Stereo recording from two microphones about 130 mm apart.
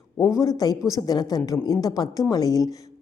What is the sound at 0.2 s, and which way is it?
Speech, 25° left (ahead or behind).